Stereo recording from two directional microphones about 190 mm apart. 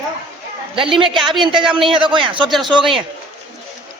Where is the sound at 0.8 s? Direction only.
25° right (ahead or behind).